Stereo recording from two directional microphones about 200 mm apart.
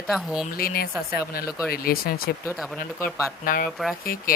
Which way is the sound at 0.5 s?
50° left (ahead or behind).